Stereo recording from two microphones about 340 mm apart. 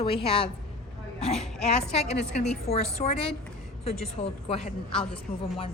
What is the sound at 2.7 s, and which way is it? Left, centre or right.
A woman's voice, centre.